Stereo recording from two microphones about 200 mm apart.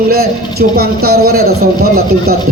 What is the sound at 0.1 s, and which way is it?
A man's voice, 50° right (ahead or behind).